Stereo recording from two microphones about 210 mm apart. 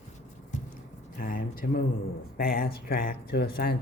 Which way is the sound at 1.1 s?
40° left (ahead or behind).